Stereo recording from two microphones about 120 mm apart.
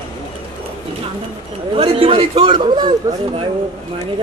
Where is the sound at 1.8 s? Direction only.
50° right (ahead or behind).